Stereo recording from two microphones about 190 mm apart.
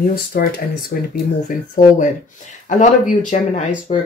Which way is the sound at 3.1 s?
40° left (ahead or behind).